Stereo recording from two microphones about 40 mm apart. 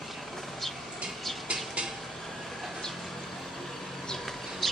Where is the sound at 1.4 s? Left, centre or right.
Right.